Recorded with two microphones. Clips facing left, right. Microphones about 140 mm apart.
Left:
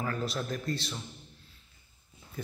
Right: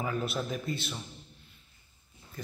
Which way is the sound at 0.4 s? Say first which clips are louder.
Even; 5° right (ahead or behind).